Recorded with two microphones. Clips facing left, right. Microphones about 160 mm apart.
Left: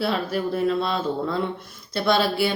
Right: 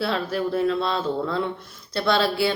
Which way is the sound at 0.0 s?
10° left (ahead or behind).